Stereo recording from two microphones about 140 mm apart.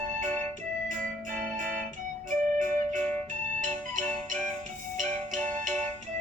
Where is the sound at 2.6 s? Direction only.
70° right (ahead or behind).